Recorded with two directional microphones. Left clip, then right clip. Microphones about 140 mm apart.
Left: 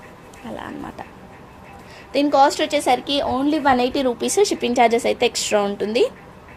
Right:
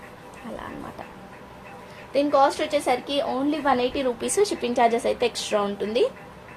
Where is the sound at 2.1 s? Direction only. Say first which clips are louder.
Left 4 dB; 60° left (ahead or behind).